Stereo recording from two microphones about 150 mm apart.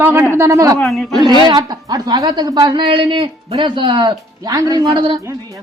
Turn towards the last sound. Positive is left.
turn(degrees=-30)  # may be behind; listen again after turning